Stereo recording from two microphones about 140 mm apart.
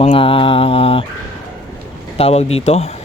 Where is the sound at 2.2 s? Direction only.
45° left (ahead or behind).